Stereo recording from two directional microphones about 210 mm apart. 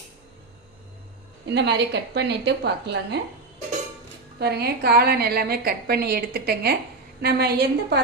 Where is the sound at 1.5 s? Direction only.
55° right (ahead or behind).